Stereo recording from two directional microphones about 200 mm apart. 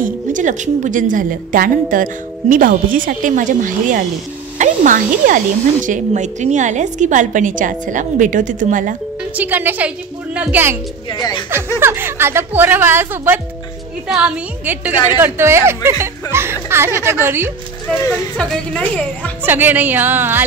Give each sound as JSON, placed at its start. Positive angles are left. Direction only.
{"t": 0.0, "sound": "a woman's voice", "side_deg": -40}
{"t": 9.3, "sound": "speech", "side_deg": -10}
{"t": 11.1, "sound": "speech", "side_deg": 20}
{"t": 11.8, "sound": "a woman's voice", "side_deg": -10}
{"t": 17.8, "sound": "speech", "side_deg": 5}
{"t": 19.4, "sound": "speech", "side_deg": -10}